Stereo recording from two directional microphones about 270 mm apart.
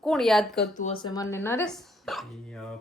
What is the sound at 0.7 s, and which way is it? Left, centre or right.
Speech, left.